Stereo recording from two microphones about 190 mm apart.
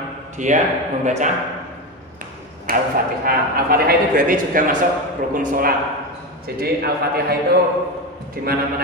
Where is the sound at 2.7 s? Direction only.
50° right (ahead or behind).